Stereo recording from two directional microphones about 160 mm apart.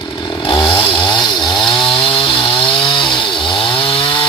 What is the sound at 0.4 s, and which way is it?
Chainsaw, 30° left (ahead or behind).